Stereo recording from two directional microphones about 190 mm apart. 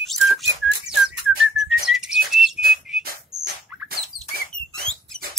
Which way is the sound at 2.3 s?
Centre (ahead or behind).